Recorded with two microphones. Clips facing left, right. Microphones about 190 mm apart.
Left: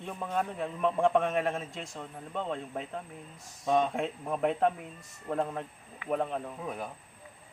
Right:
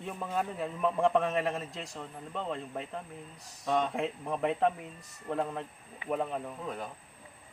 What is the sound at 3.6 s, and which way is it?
Speech, 15° left (ahead or behind).